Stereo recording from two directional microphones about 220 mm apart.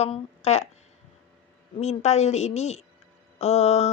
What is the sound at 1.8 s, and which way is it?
Speech, 30° left (ahead or behind).